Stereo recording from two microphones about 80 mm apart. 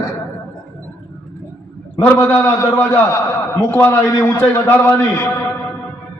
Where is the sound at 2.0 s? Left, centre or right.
Left.